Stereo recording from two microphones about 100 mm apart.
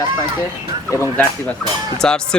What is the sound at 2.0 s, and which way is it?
Speech, 10° left (ahead or behind).